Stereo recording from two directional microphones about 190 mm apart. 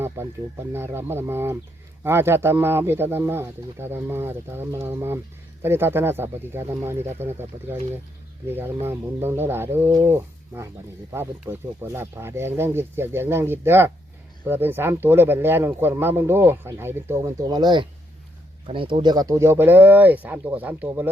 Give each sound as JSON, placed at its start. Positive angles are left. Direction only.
{"t": 0.7, "sound": "speech", "side_deg": -10}